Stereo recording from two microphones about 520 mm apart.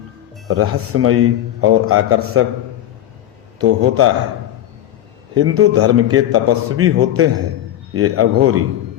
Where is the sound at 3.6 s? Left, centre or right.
Right.